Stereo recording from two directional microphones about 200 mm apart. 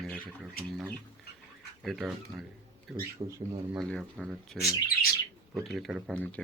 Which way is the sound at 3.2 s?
25° right (ahead or behind).